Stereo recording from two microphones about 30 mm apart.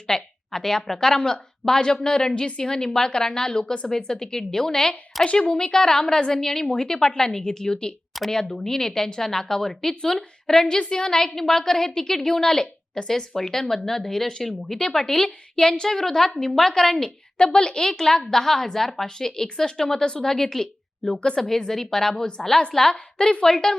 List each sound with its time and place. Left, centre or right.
0.1 s a woman's voice: centre
5.2 s speech: left
5.5 s a woman's voice: centre
8.3 s speech: centre
10.8 s speech: left
17.3 s a woman's voice: left